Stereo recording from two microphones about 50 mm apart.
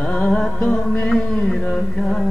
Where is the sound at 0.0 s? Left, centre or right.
Centre.